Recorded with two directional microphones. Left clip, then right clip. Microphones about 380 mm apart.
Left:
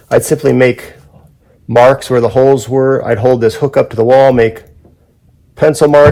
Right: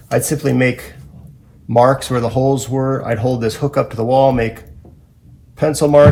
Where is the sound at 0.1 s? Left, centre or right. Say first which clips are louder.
Left 7 dB; left.